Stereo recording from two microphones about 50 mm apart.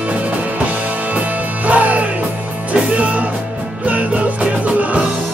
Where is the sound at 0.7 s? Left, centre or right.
Right.